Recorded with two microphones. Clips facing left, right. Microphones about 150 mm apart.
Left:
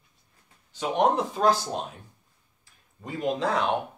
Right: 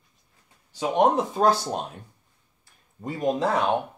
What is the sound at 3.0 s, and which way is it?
Speech, 40° right (ahead or behind).